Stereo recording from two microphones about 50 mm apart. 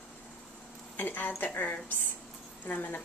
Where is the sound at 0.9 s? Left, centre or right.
Left.